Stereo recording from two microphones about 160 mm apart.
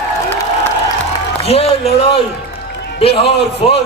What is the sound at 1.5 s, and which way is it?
Speech, 40° left (ahead or behind).